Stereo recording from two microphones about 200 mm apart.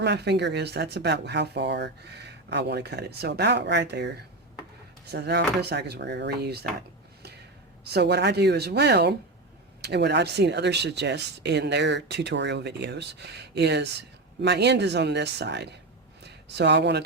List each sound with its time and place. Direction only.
0.0 s speech: 60° right (ahead or behind)
5.1 s speech: 55° right (ahead or behind)
7.9 s speech: 55° right (ahead or behind)
16.2 s a sound: 60° right (ahead or behind)